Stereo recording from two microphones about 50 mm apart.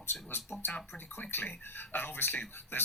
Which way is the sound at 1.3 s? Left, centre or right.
Left.